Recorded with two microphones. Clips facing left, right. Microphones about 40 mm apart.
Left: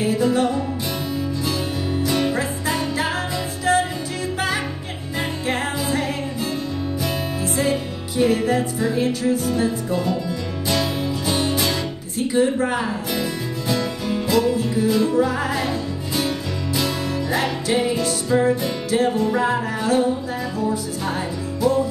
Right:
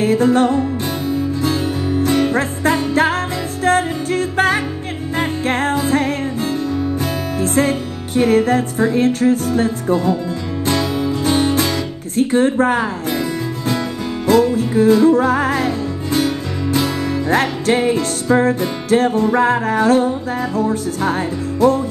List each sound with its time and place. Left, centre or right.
0.0 s music: right
1.4 s music: right
2.3 s music: right
11.1 s music: right
12.2 s speech: right
14.2 s music: right
17.3 s music: right